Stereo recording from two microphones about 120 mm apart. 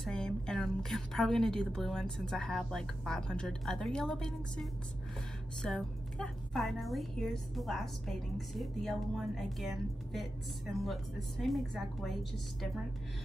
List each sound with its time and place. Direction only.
0.0 s a woman's voice: 5° left (ahead or behind)
10.7 s a woman's voice: centre (ahead or behind)